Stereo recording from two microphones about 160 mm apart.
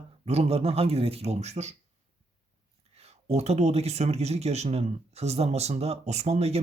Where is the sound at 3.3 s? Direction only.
40° right (ahead or behind).